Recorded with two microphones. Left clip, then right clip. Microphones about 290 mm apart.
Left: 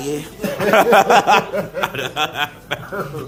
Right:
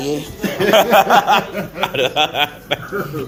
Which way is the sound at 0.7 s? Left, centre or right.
Left.